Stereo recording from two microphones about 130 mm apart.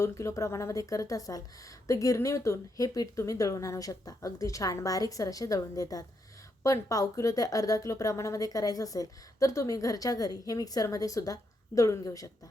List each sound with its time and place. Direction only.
0.0 s a woman's voice: 20° left (ahead or behind)